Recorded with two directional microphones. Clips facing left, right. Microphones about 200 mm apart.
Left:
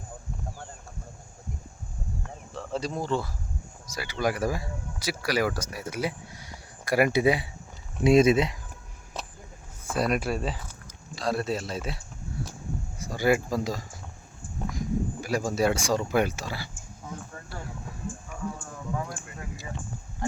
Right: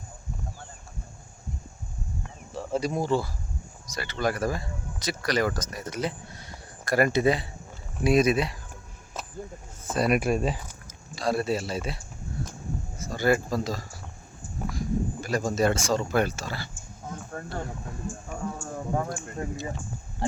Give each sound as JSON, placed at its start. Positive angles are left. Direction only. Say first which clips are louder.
{"t": 2.5, "sound": "speech", "louder": "right 4 dB", "side_deg": -10}
{"t": 3.9, "sound": "speech", "louder": "even", "side_deg": 10}
{"t": 8.0, "sound": "speech", "louder": "left 3 dB", "side_deg": 25}
{"t": 9.9, "sound": "speech", "louder": "right 2 dB", "side_deg": 0}
{"t": 10.2, "sound": "speech", "louder": "right 4 dB", "side_deg": -15}
{"t": 10.8, "sound": "speech", "louder": "right 2 dB", "side_deg": 0}
{"t": 13.0, "sound": "speech", "louder": "even", "side_deg": 10}
{"t": 17.3, "sound": "speech", "louder": "right 6 dB", "side_deg": -50}
{"t": 18.3, "sound": "a sound", "louder": "right 4 dB", "side_deg": -45}